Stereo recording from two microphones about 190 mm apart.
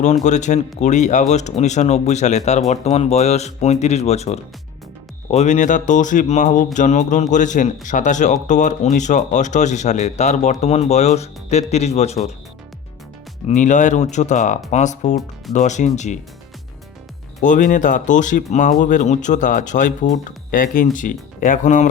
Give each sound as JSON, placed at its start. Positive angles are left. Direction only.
{"t": 0.0, "sound": "a man's voice", "side_deg": 40}
{"t": 13.5, "sound": "a man's voice", "side_deg": 40}
{"t": 17.4, "sound": "a man's voice", "side_deg": 40}